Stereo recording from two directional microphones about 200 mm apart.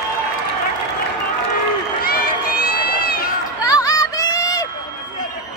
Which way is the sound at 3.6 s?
15° left (ahead or behind).